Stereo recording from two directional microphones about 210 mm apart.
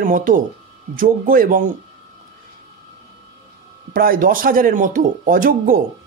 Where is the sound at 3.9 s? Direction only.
45° right (ahead or behind).